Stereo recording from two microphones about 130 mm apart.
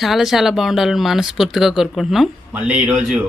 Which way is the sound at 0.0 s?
Centre (ahead or behind).